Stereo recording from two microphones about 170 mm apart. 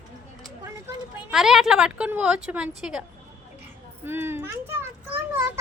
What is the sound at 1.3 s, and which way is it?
A woman's voice, 5° right (ahead or behind).